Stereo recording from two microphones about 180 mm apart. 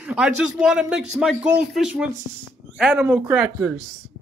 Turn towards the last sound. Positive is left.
turn(degrees=-5)  # may be behind; listen again after turning